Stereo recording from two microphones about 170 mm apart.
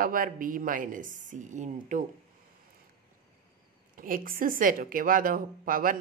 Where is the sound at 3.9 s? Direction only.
55° right (ahead or behind).